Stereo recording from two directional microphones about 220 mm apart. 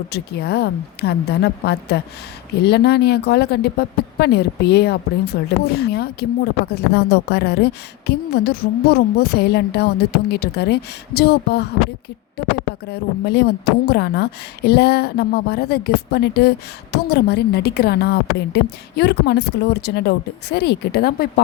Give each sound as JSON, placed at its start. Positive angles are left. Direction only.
{"t": 0.1, "sound": "speech", "side_deg": 45}